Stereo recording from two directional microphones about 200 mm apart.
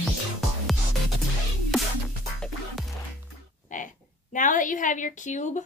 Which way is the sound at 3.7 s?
40° left (ahead or behind).